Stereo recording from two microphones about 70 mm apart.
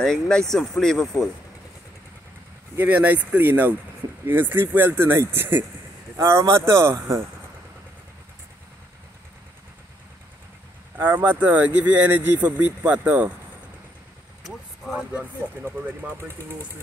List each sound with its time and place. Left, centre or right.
0.0 s speech: centre
2.8 s speech: right
6.1 s speech: right
11.0 s speech: right
14.9 s speech: centre